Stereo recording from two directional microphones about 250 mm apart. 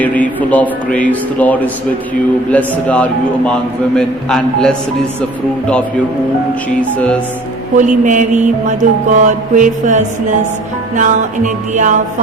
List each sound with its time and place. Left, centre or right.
0.0 s a man's voice: centre
6.9 s a man's voice: centre
7.8 s music: right